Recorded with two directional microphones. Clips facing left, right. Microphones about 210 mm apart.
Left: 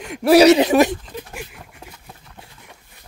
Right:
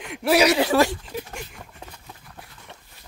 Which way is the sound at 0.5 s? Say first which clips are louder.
Left 6 dB; 20° left (ahead or behind).